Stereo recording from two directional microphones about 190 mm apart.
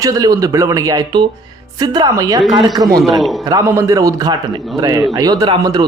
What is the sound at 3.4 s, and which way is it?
A man's voice, 15° right (ahead or behind).